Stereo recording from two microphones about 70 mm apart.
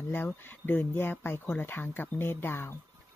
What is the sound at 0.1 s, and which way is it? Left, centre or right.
Speech, left.